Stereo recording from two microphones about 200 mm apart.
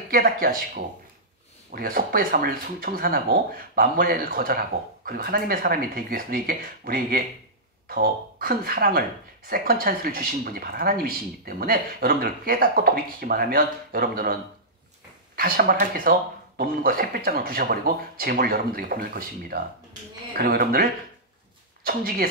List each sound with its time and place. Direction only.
0.1 s speech: 45° right (ahead or behind)